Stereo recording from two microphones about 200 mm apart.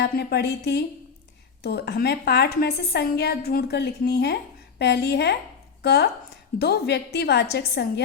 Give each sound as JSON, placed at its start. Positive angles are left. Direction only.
{"t": 0.0, "sound": "a woman's voice", "side_deg": 55}